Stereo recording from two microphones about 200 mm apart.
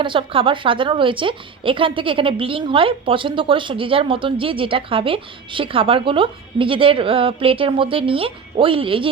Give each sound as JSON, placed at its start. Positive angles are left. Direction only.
{"t": 0.0, "sound": "a woman's voice", "side_deg": -25}